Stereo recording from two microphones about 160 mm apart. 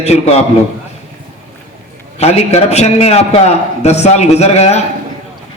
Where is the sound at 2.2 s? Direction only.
40° left (ahead or behind).